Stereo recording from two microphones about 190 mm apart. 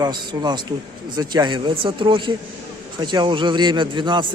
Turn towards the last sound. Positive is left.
turn(degrees=-25)  # may be behind; listen again after turning